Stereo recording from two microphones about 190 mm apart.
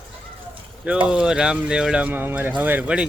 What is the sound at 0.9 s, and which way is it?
Speech, 5° right (ahead or behind).